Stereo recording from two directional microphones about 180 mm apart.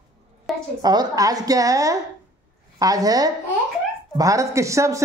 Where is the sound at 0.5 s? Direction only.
Centre (ahead or behind).